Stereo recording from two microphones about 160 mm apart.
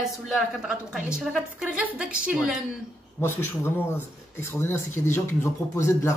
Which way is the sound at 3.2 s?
15° left (ahead or behind).